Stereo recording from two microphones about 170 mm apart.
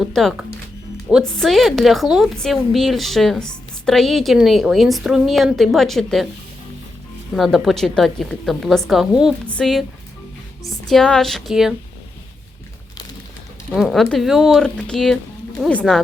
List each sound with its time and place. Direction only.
0.0 s a woman's voice: centre (ahead or behind)
7.3 s a woman's voice: centre (ahead or behind)
10.8 s a woman's voice: 5° left (ahead or behind)
13.7 s a woman's voice: centre (ahead or behind)